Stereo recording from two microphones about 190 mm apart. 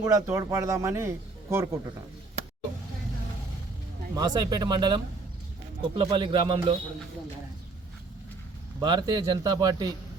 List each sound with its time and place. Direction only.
0.0 s a man's voice: 15° right (ahead or behind)
4.1 s speech: 20° right (ahead or behind)
8.8 s speech: 25° right (ahead or behind)